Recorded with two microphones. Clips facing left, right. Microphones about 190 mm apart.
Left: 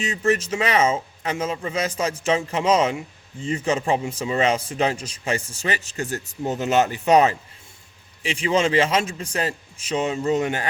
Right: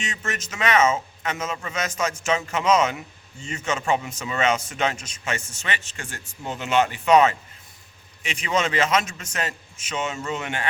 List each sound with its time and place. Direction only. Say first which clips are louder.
0.0 s speech: left 10 dB; 35° left (ahead or behind)